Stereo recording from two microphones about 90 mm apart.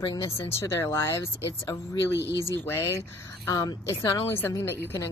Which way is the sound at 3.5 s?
40° left (ahead or behind).